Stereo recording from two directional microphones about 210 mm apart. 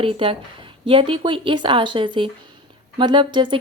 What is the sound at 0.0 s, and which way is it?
A woman's voice, 25° right (ahead or behind).